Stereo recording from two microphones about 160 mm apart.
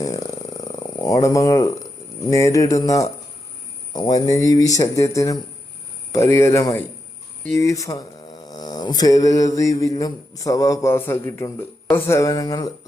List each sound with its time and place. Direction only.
0.0 s a sound: 20° left (ahead or behind)
2.3 s mantra: 20° left (ahead or behind)
6.1 s speech: 15° left (ahead or behind)
7.5 s mantra: 20° left (ahead or behind)